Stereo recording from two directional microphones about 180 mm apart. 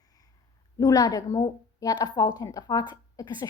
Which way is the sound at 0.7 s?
20° left (ahead or behind).